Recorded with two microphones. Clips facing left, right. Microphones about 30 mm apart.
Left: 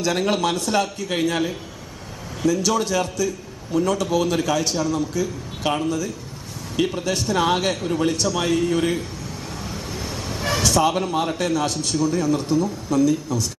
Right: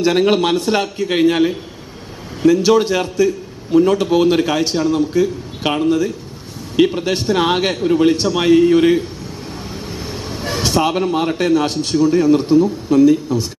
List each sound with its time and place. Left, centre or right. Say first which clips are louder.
0.0 s a man's voice: right 7 dB; right
8.1 s a man's voice: right 8 dB; right
9.7 s vehicle: right 2 dB; right
10.6 s a man's voice: right 4 dB; right